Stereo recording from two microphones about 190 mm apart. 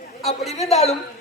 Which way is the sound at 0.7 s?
30° left (ahead or behind).